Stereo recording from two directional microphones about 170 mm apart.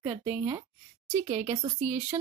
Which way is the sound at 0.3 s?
30° right (ahead or behind).